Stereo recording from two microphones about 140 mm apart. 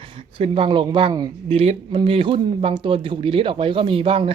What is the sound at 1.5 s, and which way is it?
A man's voice, 40° right (ahead or behind).